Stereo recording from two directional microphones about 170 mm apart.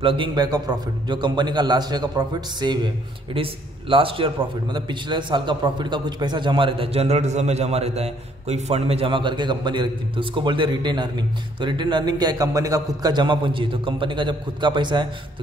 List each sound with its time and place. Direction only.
0.0 s a man's voice: 30° right (ahead or behind)
3.9 s a man's voice: 30° right (ahead or behind)